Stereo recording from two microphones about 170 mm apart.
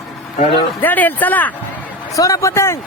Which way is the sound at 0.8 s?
10° left (ahead or behind).